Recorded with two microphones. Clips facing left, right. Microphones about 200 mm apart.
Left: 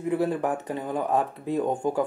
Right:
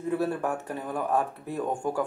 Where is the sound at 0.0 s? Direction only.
15° left (ahead or behind).